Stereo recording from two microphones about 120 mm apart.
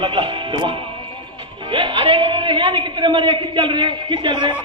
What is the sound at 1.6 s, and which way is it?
A man's voice, 45° right (ahead or behind).